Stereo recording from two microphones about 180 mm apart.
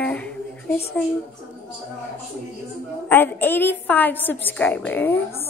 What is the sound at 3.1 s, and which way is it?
A woman's voice, 10° left (ahead or behind).